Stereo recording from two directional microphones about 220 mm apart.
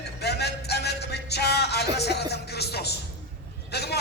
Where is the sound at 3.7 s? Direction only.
50° left (ahead or behind).